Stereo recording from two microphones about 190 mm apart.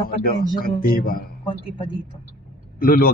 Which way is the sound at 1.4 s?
25° left (ahead or behind).